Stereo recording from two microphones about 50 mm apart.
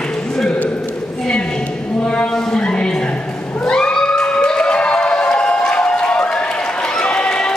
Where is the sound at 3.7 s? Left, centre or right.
Centre.